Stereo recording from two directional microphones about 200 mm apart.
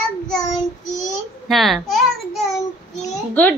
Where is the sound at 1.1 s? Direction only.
Centre (ahead or behind).